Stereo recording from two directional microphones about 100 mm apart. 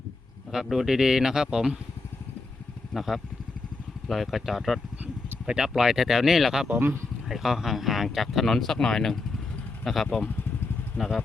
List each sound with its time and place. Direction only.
0.5 s speech: 5° right (ahead or behind)
2.9 s speech: centre (ahead or behind)
6.7 s speech: 20° right (ahead or behind)
7.3 s speech: centre (ahead or behind)